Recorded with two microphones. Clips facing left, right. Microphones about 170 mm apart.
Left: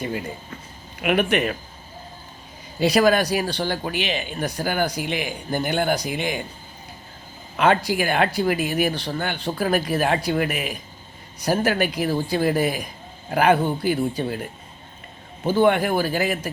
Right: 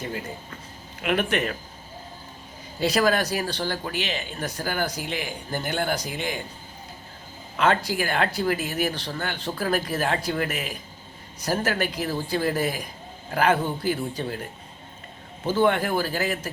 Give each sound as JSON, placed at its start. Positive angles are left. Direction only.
{"t": 1.0, "sound": "speech", "side_deg": 15}
{"t": 2.8, "sound": "speech", "side_deg": 15}
{"t": 7.5, "sound": "speech", "side_deg": 15}
{"t": 15.4, "sound": "speech", "side_deg": 15}